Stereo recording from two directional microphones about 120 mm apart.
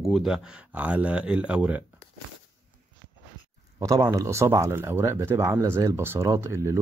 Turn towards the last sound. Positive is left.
turn(degrees=-25)  # may be behind; listen again after turning